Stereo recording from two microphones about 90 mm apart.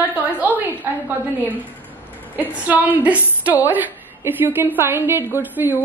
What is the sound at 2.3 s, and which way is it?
A woman's voice, 20° right (ahead or behind).